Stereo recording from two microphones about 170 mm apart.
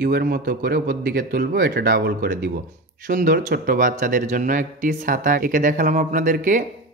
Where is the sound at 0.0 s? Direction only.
60° right (ahead or behind).